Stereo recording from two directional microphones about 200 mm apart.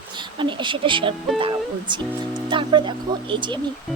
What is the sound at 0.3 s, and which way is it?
Speech, 25° right (ahead or behind).